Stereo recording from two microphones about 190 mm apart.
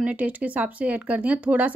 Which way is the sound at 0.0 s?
5° right (ahead or behind).